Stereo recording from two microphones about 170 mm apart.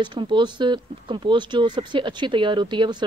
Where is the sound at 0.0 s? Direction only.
30° right (ahead or behind).